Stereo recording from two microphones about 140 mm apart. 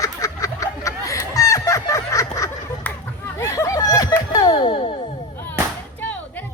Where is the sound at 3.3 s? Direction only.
20° left (ahead or behind); by 5.0 s 40° left (ahead or behind).